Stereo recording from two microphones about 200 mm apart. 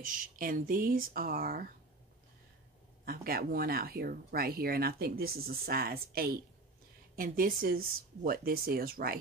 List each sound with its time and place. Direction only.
0.0 s speech: 45° right (ahead or behind)
3.1 s speech: 50° right (ahead or behind)